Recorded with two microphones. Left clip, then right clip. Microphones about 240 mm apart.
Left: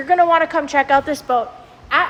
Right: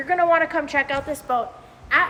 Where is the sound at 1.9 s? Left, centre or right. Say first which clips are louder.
Left 2 dB; centre.